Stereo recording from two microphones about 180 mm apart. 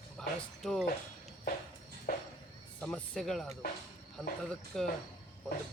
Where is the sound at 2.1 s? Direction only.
55° left (ahead or behind).